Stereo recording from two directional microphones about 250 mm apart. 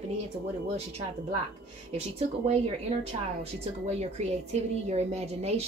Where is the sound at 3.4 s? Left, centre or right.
Right.